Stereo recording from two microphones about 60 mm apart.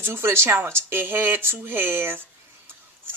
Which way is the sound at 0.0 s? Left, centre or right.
Right.